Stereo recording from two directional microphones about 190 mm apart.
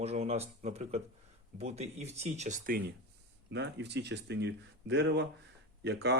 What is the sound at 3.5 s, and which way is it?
Speech, 65° right (ahead or behind).